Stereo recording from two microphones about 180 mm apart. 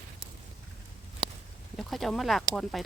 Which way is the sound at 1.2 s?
25° right (ahead or behind).